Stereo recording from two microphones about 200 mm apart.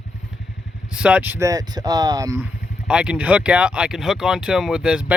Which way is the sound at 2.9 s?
5° right (ahead or behind).